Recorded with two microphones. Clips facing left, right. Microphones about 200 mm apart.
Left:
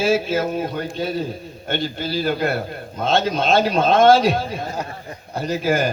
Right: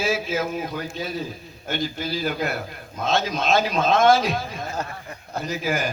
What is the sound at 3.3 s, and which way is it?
Speech, 30° left (ahead or behind).